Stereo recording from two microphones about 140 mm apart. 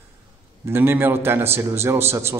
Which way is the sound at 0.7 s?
15° right (ahead or behind).